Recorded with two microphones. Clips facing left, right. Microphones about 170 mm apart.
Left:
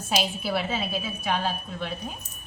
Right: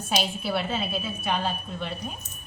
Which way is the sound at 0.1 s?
Centre (ahead or behind).